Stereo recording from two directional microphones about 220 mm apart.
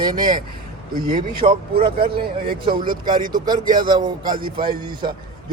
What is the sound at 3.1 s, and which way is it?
Speech, 40° right (ahead or behind).